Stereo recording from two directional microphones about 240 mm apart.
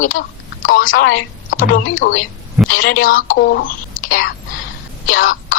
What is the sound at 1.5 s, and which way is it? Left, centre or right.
Speech, left.